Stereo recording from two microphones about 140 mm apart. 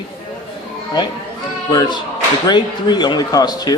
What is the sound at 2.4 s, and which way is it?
Speech, 30° left (ahead or behind).